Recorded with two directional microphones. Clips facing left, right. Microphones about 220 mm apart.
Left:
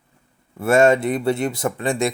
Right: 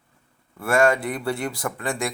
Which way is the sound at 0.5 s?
25° left (ahead or behind).